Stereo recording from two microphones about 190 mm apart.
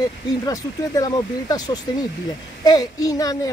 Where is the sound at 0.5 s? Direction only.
20° left (ahead or behind).